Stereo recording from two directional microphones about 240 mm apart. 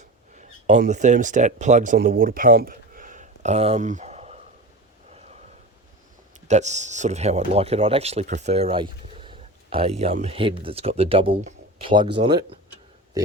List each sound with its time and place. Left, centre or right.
0.0 s speech: right
5.1 s a sound: right
6.5 s speech: right